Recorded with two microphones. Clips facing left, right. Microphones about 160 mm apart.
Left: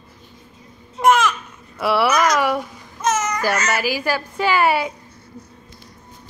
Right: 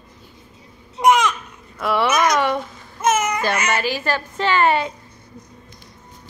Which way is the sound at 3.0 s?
10° right (ahead or behind).